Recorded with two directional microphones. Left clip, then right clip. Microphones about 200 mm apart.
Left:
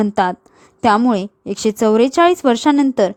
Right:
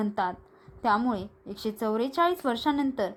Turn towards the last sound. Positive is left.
turn(degrees=50)  # may be behind; listen again after turning